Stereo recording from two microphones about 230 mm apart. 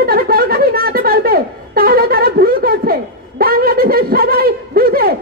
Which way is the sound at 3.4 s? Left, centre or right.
Right.